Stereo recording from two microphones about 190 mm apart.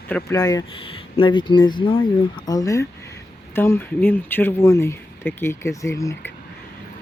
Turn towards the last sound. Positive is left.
turn(degrees=15)  # may be behind; listen again after turning